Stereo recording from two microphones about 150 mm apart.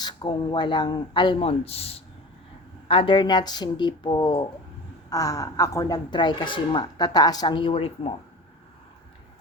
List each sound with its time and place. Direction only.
0.0 s speech: 30° left (ahead or behind)